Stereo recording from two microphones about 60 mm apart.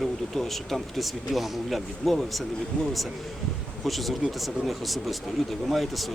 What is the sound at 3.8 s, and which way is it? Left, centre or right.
Speech, centre.